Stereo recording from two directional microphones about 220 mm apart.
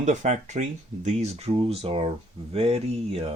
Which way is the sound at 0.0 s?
35° right (ahead or behind).